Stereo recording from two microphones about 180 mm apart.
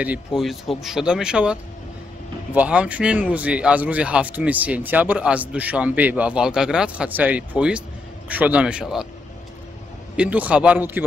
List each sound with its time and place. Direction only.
0.0 s speech: 5° right (ahead or behind)
10.1 s speech: 10° right (ahead or behind)